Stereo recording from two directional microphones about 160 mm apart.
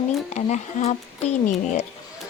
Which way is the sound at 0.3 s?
45° left (ahead or behind).